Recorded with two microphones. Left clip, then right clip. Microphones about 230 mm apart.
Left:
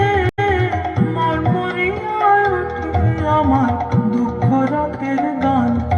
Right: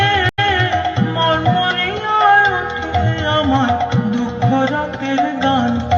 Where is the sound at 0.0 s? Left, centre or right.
Left.